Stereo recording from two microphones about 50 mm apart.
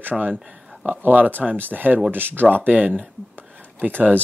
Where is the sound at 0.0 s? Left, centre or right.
Right.